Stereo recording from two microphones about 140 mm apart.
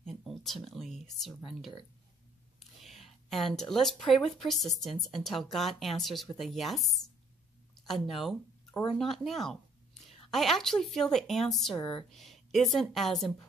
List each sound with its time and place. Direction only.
0.0 s speech: 5° left (ahead or behind)
2.8 s a sound: centre (ahead or behind)
3.7 s a woman's voice: centre (ahead or behind)
7.8 s a woman's voice: centre (ahead or behind)
11.7 s speech: 35° left (ahead or behind)
12.1 s a woman's voice: centre (ahead or behind)